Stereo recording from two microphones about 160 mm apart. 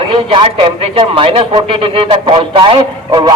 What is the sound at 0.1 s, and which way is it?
Speech, 35° right (ahead or behind).